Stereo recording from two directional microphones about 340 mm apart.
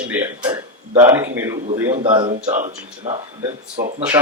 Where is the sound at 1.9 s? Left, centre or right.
Centre.